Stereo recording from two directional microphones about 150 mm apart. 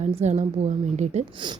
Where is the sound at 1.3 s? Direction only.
30° right (ahead or behind).